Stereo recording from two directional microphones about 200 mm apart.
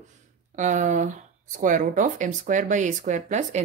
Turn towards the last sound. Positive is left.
turn(degrees=-35)  # may be behind; listen again after turning